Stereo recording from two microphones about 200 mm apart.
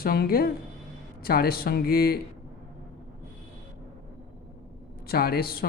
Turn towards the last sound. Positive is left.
turn(degrees=50)  # may be behind; listen again after turning